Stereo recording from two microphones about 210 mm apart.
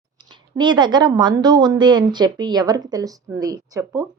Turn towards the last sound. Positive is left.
turn(degrees=-15)  # may be behind; listen again after turning